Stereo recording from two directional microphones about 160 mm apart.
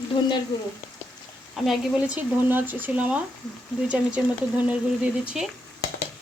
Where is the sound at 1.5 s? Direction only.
Centre (ahead or behind).